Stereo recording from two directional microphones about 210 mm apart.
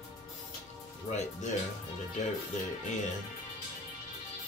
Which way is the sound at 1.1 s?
35° left (ahead or behind).